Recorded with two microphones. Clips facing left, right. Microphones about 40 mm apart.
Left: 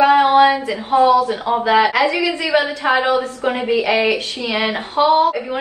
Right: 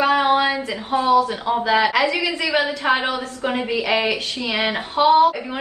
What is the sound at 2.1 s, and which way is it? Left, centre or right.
A woman's voice, left.